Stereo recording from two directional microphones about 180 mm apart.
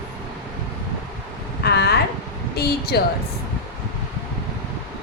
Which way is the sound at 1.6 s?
65° left (ahead or behind).